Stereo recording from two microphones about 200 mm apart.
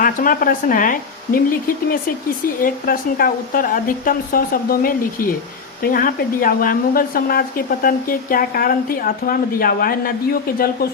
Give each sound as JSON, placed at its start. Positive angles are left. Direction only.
{"t": 0.0, "sound": "speech", "side_deg": 45}